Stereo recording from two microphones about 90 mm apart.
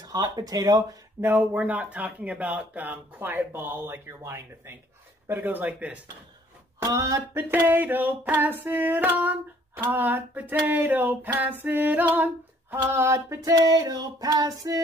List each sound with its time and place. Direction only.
0.0 s speech: 50° right (ahead or behind)
1.2 s speech: 20° right (ahead or behind)
6.8 s female singing: 40° right (ahead or behind)
7.3 s speech: 25° right (ahead or behind)
12.9 s female singing: 30° right (ahead or behind)